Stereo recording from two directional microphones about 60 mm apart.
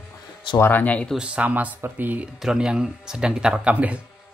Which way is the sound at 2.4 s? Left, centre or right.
Centre.